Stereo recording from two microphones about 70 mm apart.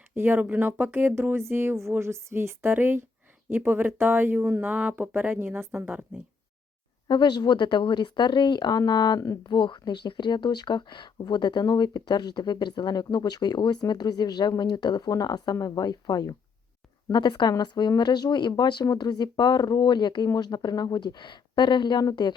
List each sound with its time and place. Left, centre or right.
0.1 s speech: right
4.7 s speech: right
7.1 s speech: left
15.5 s speech: left
17.1 s speech: left